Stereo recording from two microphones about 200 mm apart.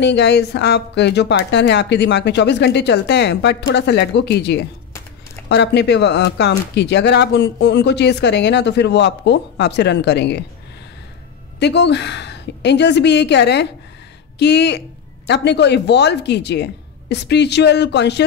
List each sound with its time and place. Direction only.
0.0 s speech: 60° left (ahead or behind)
11.6 s speech: 60° left (ahead or behind)